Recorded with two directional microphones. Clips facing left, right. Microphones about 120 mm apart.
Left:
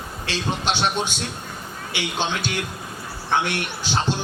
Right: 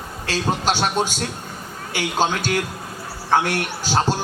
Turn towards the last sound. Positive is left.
turn(degrees=-40)  # may be behind; listen again after turning